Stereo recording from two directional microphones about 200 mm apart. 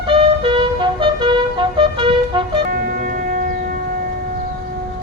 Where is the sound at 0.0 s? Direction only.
25° right (ahead or behind).